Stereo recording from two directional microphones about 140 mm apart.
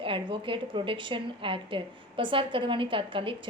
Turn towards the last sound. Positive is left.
turn(degrees=-40)  # may be behind; listen again after turning